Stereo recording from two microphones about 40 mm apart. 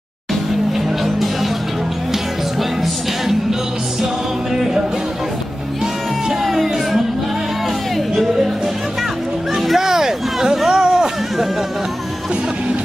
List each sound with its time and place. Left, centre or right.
1.0 s music: centre
6.4 s music: centre
9.8 s a sound: centre